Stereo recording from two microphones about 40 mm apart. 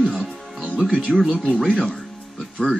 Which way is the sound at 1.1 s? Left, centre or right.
Centre.